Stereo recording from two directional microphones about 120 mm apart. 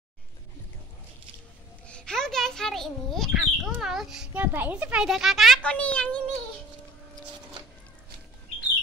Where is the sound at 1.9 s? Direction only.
5° left (ahead or behind).